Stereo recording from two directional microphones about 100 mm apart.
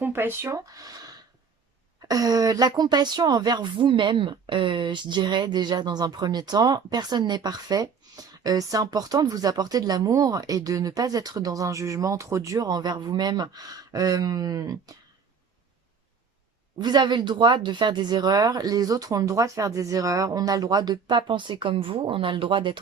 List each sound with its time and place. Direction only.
0.0 s speech: 20° right (ahead or behind); by 14.9 s 40° right (ahead or behind)
16.7 s speech: 45° right (ahead or behind)